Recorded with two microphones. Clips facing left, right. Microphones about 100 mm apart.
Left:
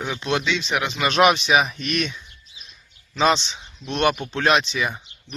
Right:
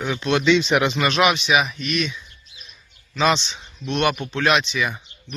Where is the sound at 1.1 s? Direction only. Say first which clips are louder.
Left 5 dB; 35° left (ahead or behind).